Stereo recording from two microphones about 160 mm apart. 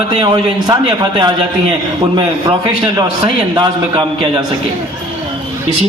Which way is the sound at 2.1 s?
25° right (ahead or behind).